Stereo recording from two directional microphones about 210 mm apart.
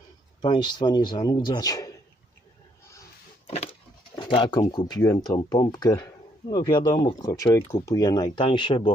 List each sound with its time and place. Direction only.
0.4 s speech: 20° left (ahead or behind)
3.4 s a sound: 30° left (ahead or behind)
4.1 s speech: 20° left (ahead or behind)